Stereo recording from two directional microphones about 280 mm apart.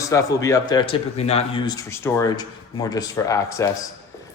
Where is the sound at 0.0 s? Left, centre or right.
Centre.